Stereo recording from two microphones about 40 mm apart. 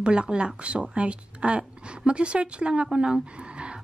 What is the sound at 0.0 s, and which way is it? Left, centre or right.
A woman's voice, right.